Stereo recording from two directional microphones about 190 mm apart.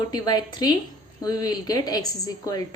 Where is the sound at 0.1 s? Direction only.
20° left (ahead or behind).